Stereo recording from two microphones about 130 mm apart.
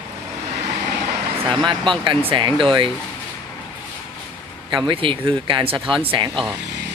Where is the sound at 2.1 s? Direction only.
40° right (ahead or behind).